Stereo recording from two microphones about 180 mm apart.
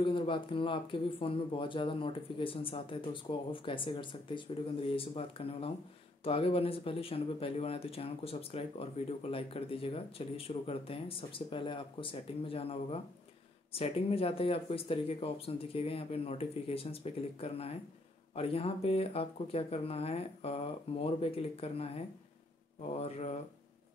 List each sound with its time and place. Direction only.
0.0 s speech: 30° left (ahead or behind)